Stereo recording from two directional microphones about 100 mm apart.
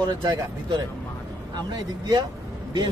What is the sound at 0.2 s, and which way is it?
Speech, 50° right (ahead or behind).